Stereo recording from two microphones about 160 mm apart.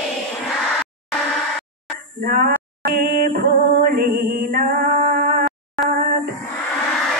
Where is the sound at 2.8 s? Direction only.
65° right (ahead or behind).